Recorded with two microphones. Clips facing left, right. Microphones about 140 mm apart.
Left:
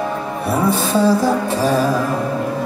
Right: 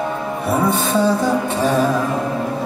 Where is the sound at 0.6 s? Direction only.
Centre (ahead or behind).